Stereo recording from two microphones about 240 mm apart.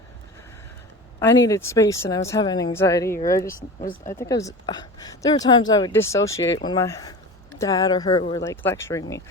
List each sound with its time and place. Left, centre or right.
1.2 s speech: centre